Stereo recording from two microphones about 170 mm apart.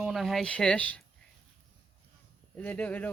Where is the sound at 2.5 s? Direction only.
10° left (ahead or behind).